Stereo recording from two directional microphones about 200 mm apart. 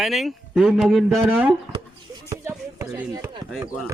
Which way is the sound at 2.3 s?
15° right (ahead or behind).